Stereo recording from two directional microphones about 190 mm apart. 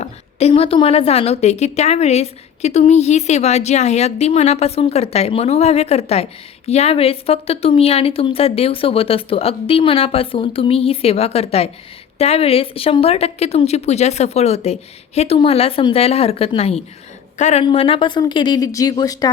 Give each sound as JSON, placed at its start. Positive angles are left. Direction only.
{"t": 0.0, "sound": "a woman's voice", "side_deg": 35}